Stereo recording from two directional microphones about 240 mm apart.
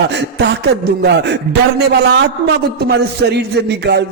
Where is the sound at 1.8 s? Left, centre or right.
Right.